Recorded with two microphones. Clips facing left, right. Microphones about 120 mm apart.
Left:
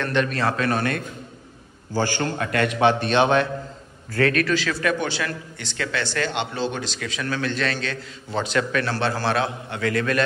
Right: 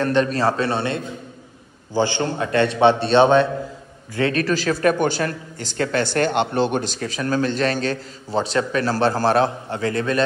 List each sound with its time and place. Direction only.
0.0 s a man's voice: 35° right (ahead or behind)